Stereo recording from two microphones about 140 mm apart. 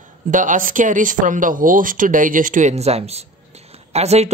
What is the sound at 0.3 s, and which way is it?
Speech, 70° right (ahead or behind).